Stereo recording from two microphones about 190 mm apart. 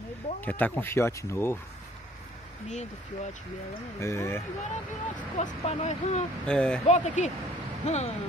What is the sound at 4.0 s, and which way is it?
Speech, 15° left (ahead or behind).